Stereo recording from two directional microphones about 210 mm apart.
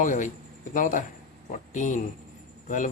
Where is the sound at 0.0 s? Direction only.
35° left (ahead or behind).